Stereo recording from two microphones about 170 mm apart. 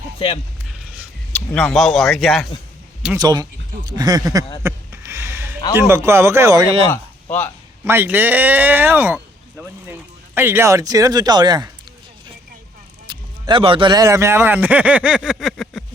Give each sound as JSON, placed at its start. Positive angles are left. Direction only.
{"t": 1.3, "sound": "speech", "side_deg": 5}
{"t": 3.2, "sound": "speech", "side_deg": -25}
{"t": 4.6, "sound": "a sound", "side_deg": -15}
{"t": 5.7, "sound": "speech", "side_deg": -15}
{"t": 6.8, "sound": "speech", "side_deg": 10}
{"t": 7.9, "sound": "speech", "side_deg": -10}
{"t": 13.1, "sound": "a man's voice", "side_deg": -25}